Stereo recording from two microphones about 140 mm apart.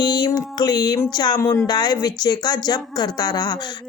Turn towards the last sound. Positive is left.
turn(degrees=30)  # may be behind; listen again after turning